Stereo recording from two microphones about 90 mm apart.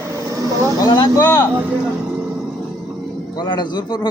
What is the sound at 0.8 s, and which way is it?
Speech, 45° left (ahead or behind).